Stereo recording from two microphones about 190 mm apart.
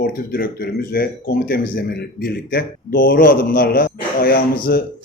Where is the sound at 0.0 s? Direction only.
55° left (ahead or behind).